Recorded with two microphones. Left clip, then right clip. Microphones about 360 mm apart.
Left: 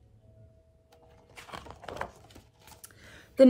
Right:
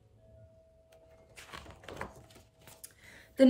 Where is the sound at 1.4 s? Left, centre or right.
Centre.